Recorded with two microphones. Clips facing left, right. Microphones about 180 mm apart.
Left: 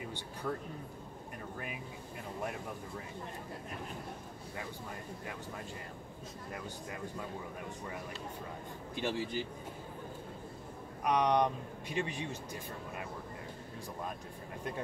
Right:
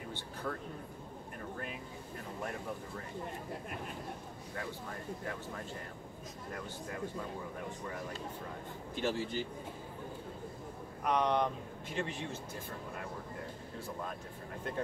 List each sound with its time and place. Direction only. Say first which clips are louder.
9.0 s speech: right 1 dB; 10° left (ahead or behind)
11.1 s speech: left 2 dB; 15° left (ahead or behind)